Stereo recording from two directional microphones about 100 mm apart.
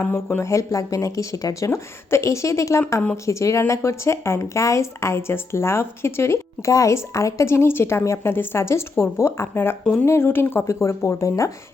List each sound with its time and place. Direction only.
0.0 s speech: 20° left (ahead or behind)
9.8 s speech: 10° left (ahead or behind)
10.1 s speech: 20° left (ahead or behind)